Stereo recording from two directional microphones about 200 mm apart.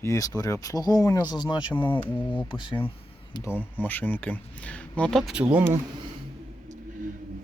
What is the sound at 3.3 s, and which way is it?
Speech, 10° left (ahead or behind).